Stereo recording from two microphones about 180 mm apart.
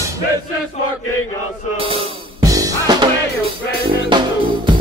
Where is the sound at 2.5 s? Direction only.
20° right (ahead or behind).